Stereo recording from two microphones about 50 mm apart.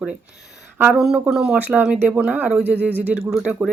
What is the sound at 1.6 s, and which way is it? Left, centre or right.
Speech, right.